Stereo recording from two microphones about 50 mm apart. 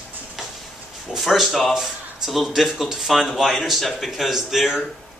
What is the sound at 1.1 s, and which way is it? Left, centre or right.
Speech, centre.